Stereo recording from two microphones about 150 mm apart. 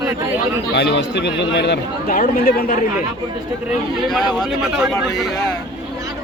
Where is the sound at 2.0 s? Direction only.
70° left (ahead or behind).